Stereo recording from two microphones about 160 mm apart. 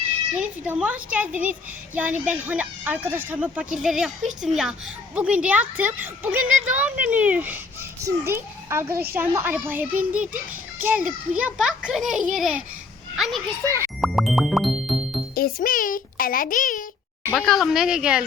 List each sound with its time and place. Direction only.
0.3 s a woman's voice: 5° right (ahead or behind)
14.0 s music: centre (ahead or behind)
15.4 s a child's voice: 65° left (ahead or behind)
17.3 s speech: centre (ahead or behind)